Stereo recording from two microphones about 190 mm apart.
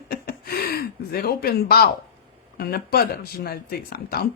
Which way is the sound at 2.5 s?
55° left (ahead or behind).